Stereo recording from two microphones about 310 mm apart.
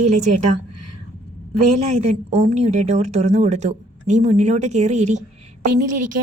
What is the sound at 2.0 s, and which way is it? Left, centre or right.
A woman's voice, right.